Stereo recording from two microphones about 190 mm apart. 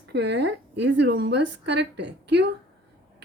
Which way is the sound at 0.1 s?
60° right (ahead or behind).